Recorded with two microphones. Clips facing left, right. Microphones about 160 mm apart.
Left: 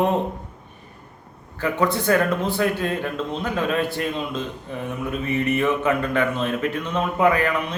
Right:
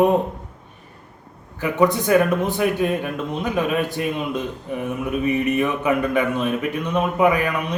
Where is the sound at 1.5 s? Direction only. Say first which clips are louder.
Right 3 dB; 15° right (ahead or behind).